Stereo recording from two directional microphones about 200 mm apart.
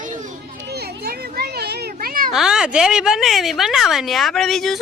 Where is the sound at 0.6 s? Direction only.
55° right (ahead or behind).